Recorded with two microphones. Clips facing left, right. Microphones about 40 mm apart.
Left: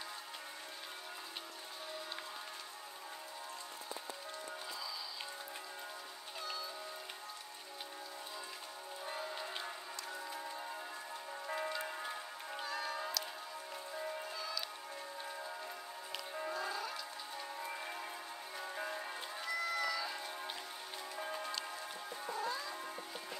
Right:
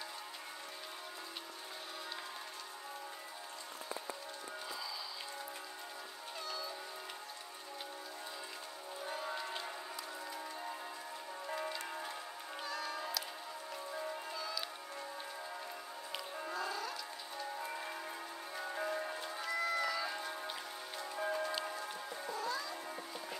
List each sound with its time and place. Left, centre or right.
6.4 s cat: centre
12.5 s cat: centre
13.9 s music: centre
16.3 s music: centre
18.6 s music: centre
22.4 s music: centre